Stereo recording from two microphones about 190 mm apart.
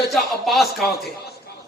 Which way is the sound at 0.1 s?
Centre (ahead or behind).